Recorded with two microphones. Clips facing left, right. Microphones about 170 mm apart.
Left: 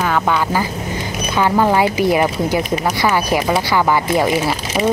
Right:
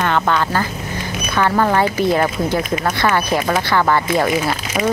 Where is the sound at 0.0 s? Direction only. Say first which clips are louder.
Even; 5° left (ahead or behind).